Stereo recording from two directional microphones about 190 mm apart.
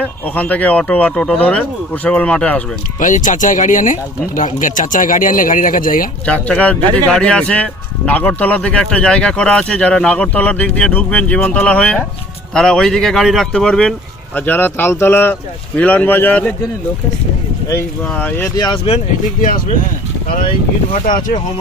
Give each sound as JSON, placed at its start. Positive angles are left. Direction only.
{"t": 0.0, "sound": "speech", "side_deg": 10}
{"t": 3.0, "sound": "speech", "side_deg": 45}
{"t": 6.2, "sound": "a man's voice", "side_deg": 5}
{"t": 17.7, "sound": "speech", "side_deg": 10}
{"t": 18.5, "sound": "speech", "side_deg": 25}
{"t": 19.4, "sound": "speech", "side_deg": 45}
{"t": 20.9, "sound": "speech", "side_deg": 45}